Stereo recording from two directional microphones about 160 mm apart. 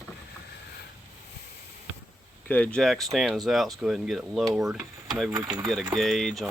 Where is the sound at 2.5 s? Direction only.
10° left (ahead or behind).